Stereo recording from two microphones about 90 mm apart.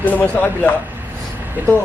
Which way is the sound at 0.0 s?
15° left (ahead or behind).